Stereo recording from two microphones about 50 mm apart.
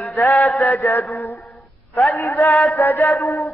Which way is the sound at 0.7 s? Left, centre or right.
Left.